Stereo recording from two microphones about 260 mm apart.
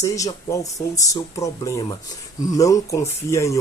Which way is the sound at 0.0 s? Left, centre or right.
Centre.